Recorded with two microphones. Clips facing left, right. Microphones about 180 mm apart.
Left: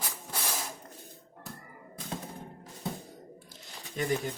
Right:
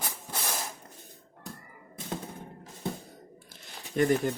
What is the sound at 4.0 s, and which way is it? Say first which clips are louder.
Speech: right 6 dB; 55° right (ahead or behind).